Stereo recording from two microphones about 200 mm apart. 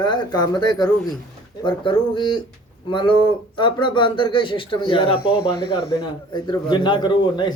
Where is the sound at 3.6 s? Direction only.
25° left (ahead or behind).